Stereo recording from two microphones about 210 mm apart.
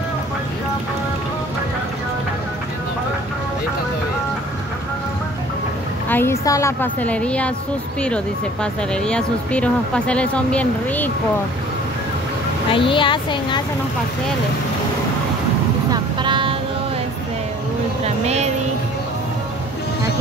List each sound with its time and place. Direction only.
6.0 s a woman's voice: 10° left (ahead or behind)
8.9 s speech: 5° left (ahead or behind)
12.7 s speech: 25° left (ahead or behind)
15.9 s vehicle: 20° right (ahead or behind)
18.0 s a sound: 30° right (ahead or behind)